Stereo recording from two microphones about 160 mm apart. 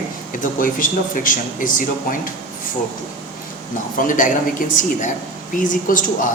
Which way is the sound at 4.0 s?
55° left (ahead or behind).